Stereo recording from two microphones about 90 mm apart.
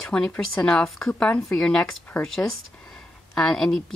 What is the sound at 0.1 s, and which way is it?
Speech, 5° left (ahead or behind).